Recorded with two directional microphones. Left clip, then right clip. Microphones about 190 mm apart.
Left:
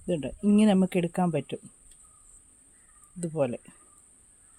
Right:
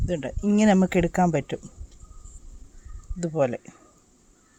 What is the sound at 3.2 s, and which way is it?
Speech, 10° right (ahead or behind).